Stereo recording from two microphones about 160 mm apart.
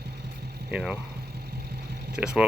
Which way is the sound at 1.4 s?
80° right.